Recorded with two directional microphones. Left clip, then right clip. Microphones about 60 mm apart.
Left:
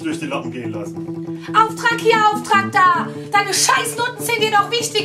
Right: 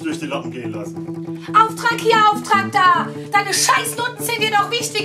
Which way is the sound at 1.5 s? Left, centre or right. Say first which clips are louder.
Right 1 dB; right.